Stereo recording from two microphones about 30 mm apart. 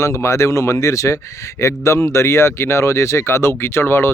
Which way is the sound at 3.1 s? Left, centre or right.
Left.